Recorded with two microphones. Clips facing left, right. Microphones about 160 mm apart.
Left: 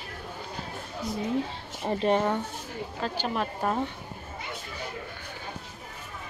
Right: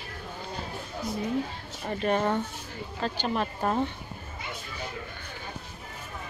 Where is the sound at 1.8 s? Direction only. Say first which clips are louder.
Left 3 dB; 25° left (ahead or behind).